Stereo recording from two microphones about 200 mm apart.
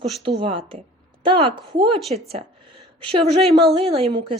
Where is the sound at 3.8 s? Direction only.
30° right (ahead or behind).